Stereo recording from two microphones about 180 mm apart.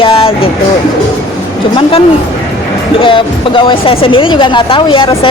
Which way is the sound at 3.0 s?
30° left (ahead or behind).